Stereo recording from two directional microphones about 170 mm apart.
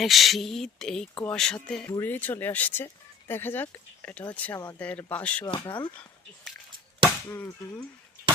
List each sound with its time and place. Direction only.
0.0 s speech: centre (ahead or behind)
1.1 s speech: 15° left (ahead or behind)
4.5 s speech: 20° left (ahead or behind)
4.8 s speech: 10° left (ahead or behind)
7.3 s speech: 10° left (ahead or behind)